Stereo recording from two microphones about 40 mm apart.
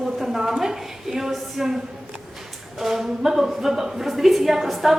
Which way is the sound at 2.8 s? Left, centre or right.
Centre.